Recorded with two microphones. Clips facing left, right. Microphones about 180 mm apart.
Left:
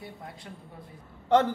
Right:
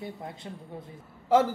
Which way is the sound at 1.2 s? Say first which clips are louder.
Even; 5° right (ahead or behind).